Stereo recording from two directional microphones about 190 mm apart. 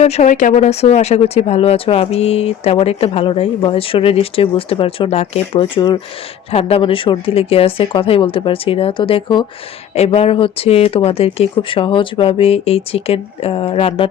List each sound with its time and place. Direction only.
0.0 s speech: 35° left (ahead or behind)